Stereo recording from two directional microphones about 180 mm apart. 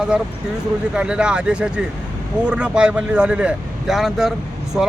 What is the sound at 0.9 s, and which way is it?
Speech, 5° right (ahead or behind).